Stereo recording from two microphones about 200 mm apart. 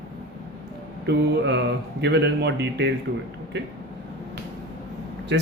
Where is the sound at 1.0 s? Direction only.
60° right (ahead or behind).